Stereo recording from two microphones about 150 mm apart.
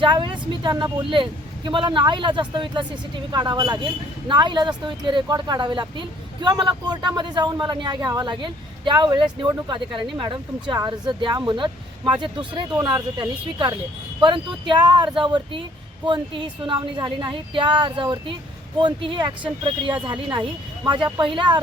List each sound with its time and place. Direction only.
0.0 s speech: 30° right (ahead or behind)